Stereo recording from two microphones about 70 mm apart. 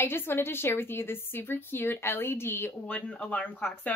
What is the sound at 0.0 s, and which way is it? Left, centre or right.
Speech, left.